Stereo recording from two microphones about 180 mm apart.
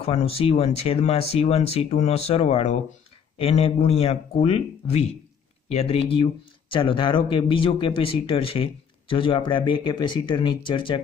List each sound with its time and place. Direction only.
0.0 s speech: 35° left (ahead or behind)